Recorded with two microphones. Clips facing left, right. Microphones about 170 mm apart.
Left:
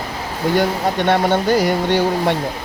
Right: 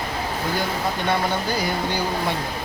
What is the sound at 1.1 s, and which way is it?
Speech, 75° left (ahead or behind).